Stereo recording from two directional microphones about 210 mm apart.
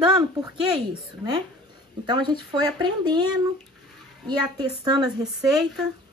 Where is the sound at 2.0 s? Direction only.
20° right (ahead or behind).